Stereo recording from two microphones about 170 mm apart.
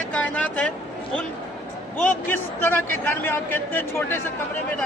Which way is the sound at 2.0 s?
10° left (ahead or behind).